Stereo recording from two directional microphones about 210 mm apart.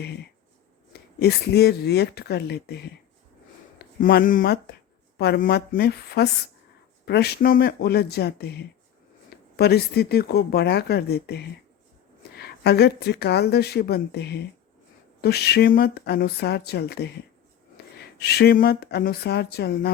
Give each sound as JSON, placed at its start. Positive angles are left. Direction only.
{"t": 1.2, "sound": "speech", "side_deg": 50}
{"t": 4.0, "sound": "speech", "side_deg": 40}
{"t": 18.2, "sound": "speech", "side_deg": 50}